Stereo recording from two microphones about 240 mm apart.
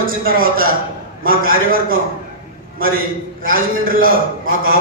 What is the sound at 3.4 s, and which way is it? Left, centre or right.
Speech, right.